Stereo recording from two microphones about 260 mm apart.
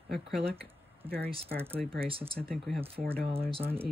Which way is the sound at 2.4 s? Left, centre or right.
Centre.